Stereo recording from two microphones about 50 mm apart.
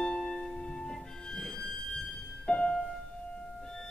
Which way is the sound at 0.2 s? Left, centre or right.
Centre.